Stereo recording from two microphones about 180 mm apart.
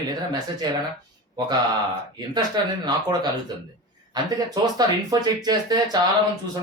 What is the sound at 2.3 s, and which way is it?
Speech, 20° right (ahead or behind).